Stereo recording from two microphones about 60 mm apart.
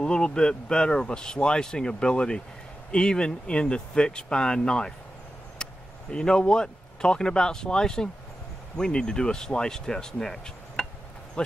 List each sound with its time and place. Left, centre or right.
0.0 s speech: centre